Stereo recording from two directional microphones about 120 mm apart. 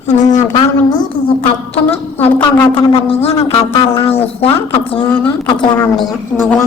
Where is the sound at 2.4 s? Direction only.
40° left (ahead or behind).